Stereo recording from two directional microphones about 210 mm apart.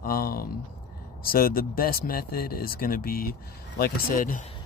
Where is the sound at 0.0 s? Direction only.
45° left (ahead or behind).